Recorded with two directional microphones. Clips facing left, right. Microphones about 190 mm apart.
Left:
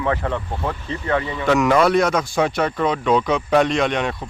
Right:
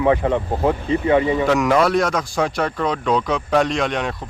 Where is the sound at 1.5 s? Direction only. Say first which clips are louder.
Left 6 dB; centre (ahead or behind).